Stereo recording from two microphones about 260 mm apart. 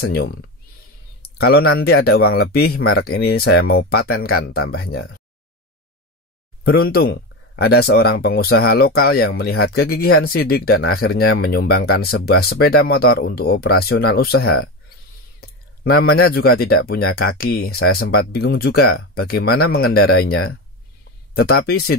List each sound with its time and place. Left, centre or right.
0.0 s speech: left
1.4 s speech: left
6.9 s speech: left
15.4 s speech: left